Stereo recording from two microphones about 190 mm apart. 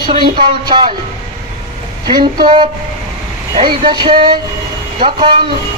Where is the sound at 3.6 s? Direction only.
25° right (ahead or behind).